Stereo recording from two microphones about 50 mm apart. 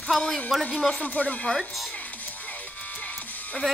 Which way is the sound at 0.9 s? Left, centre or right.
Left.